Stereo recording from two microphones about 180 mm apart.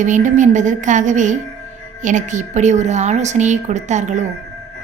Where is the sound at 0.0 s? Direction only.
45° right (ahead or behind).